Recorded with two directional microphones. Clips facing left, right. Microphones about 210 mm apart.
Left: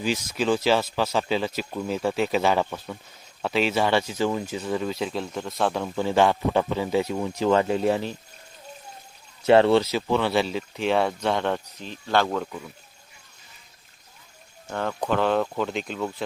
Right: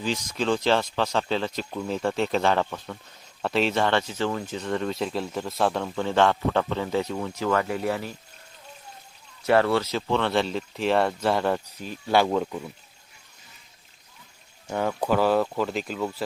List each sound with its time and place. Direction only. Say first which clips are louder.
0.0 s speech: left 2 dB; 10° left (ahead or behind); by 8.1 s 25° left (ahead or behind)
9.5 s speech: left 4 dB; 25° left (ahead or behind)
9.8 s speech: left 2 dB; 5° left (ahead or behind); by 12.5 s 15° right (ahead or behind)
14.7 s speech: right 2 dB; 10° right (ahead or behind)